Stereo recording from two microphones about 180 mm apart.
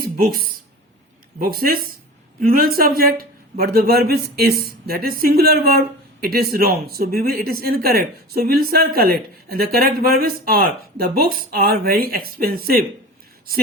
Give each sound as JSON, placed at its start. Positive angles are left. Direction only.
{"t": 0.2, "sound": "speech", "side_deg": -55}